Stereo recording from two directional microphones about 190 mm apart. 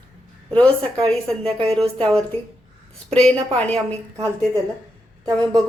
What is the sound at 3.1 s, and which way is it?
Speech, 5° left (ahead or behind).